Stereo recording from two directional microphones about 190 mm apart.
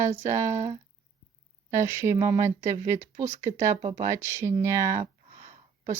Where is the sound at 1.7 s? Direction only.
15° right (ahead or behind).